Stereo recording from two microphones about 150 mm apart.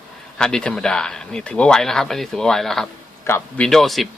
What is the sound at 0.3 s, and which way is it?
Speech, 5° left (ahead or behind).